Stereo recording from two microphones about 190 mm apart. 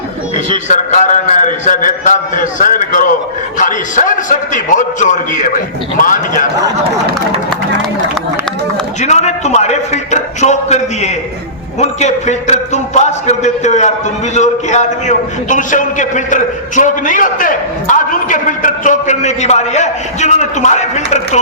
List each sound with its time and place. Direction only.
0.3 s a man's voice: 40° left (ahead or behind)
9.0 s a man's voice: 35° left (ahead or behind)